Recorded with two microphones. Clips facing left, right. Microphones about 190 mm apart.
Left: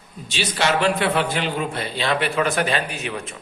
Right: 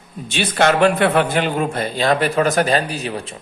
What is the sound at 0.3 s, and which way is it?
A man's voice, 55° right (ahead or behind).